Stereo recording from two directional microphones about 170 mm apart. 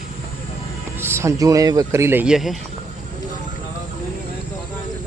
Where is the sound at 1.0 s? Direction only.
15° right (ahead or behind).